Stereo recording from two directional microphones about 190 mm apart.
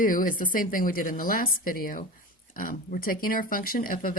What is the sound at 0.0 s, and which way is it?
Speech, 45° left (ahead or behind).